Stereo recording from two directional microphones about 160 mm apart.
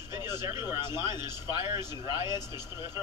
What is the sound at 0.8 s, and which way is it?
Speech, 25° left (ahead or behind).